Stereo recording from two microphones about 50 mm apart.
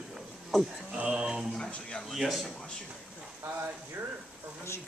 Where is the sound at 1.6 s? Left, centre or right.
Centre.